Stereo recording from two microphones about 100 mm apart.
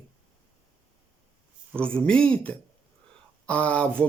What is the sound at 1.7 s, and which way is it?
Speech, 10° left (ahead or behind).